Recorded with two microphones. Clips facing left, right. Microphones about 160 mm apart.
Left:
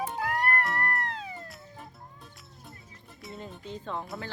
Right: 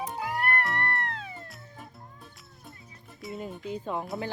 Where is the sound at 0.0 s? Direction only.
Centre (ahead or behind).